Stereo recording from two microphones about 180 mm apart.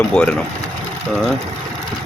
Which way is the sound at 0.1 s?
5° left (ahead or behind).